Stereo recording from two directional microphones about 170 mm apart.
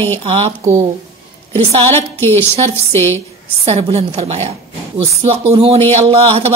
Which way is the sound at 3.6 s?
40° right (ahead or behind).